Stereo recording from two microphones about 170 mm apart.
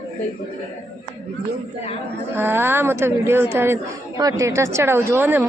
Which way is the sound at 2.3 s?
15° right (ahead or behind).